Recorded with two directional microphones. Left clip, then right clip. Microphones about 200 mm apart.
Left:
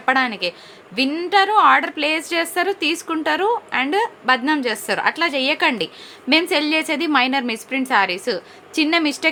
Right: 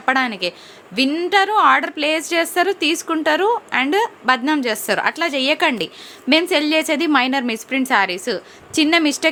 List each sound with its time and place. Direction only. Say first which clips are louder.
0.0 s a woman's voice: even; 15° right (ahead or behind)